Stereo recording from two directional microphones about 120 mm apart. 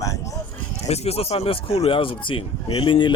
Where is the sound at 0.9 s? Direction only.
60° left (ahead or behind).